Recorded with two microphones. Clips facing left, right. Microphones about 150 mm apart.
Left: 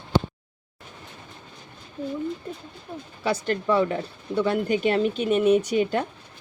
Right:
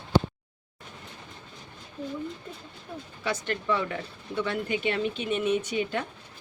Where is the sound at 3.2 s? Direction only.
35° left (ahead or behind).